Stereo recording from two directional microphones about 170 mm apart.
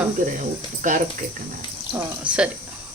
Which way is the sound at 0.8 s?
45° right (ahead or behind).